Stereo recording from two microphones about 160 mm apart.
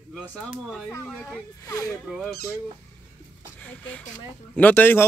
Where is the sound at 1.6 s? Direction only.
20° left (ahead or behind).